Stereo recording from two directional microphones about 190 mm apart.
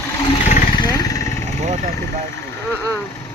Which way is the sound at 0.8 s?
20° left (ahead or behind).